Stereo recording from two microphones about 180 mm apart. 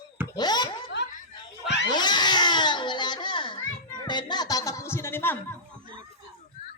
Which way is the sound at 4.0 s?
25° left (ahead or behind).